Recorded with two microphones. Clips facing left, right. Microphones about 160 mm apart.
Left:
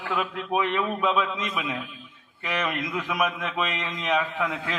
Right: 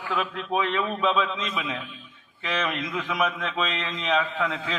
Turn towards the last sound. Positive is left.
turn(degrees=10)  # may be behind; listen again after turning